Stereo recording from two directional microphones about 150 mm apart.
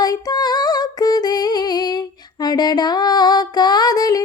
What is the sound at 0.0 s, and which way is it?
Music, 25° left (ahead or behind).